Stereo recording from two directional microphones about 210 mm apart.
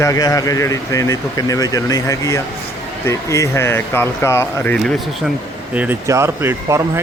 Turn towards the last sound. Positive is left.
turn(degrees=-15)  # may be behind; listen again after turning